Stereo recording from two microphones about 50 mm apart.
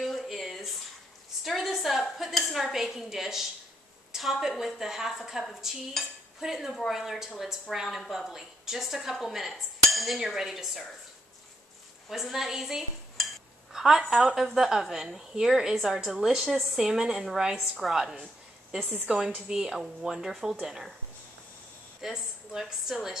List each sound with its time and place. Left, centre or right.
0.0 s a sound: centre
2.1 s dishes: centre
4.1 s a woman's voice: centre
8.3 s dishes: centre
12.1 s dishes: centre
18.1 s a sound: right
19.0 s a woman's voice: centre
22.1 s a woman's voice: centre